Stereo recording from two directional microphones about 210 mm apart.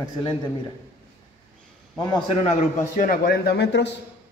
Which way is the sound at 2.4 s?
40° left (ahead or behind).